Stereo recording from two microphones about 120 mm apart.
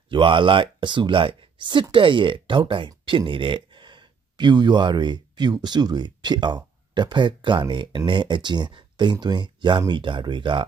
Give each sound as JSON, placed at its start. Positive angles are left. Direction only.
{"t": 0.1, "sound": "speech", "side_deg": -45}